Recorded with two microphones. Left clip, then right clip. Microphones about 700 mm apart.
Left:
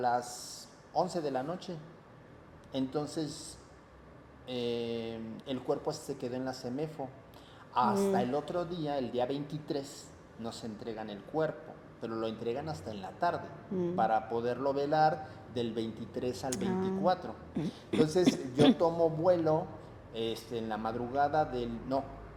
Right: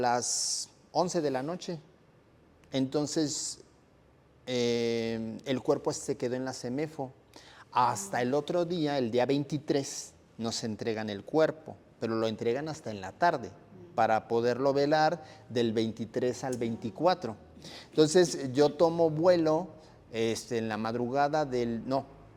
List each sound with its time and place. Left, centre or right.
0.0 s a man's voice: right
2.7 s a man's voice: right
16.8 s a man's voice: right